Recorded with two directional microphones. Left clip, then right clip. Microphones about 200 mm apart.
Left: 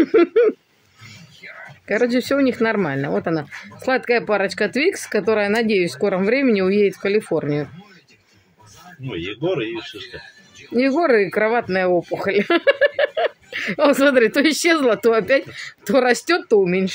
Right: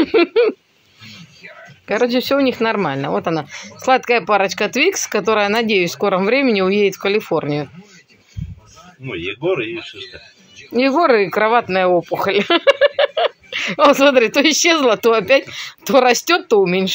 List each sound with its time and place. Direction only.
0.0 s speech: 15° left (ahead or behind)
1.9 s speech: 10° left (ahead or behind)
9.0 s speech: 20° left (ahead or behind)
10.8 s speech: 5° left (ahead or behind)